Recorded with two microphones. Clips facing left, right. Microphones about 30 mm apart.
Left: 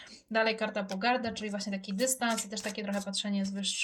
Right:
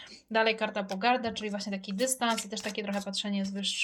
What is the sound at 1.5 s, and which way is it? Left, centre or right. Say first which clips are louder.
Speech: right 1 dB; right.